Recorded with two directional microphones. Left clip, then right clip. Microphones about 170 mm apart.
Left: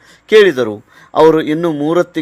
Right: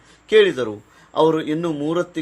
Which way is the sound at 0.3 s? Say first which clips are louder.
Left 7 dB; 40° left (ahead or behind).